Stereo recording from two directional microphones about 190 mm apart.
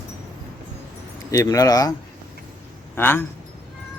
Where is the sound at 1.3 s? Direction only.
15° left (ahead or behind).